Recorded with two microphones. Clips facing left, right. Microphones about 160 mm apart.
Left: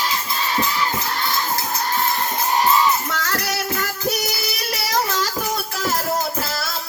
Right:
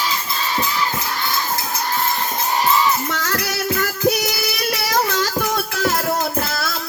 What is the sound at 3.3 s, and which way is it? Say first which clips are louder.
Music: right 1 dB; 40° left (ahead or behind).